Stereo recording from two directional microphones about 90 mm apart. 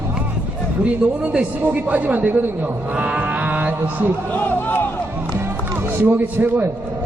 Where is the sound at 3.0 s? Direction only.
15° right (ahead or behind).